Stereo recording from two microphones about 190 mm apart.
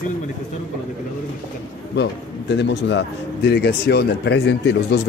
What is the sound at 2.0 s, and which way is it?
A man's voice, 65° left (ahead or behind).